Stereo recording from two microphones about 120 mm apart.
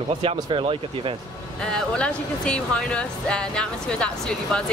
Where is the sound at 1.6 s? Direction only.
10° left (ahead or behind).